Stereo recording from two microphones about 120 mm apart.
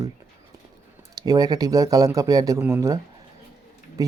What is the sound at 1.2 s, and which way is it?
Speech, 30° right (ahead or behind).